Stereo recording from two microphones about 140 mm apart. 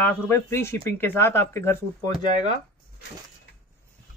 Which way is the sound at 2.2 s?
60° right (ahead or behind).